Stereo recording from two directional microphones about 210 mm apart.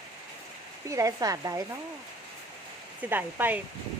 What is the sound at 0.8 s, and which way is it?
Speech, 15° right (ahead or behind).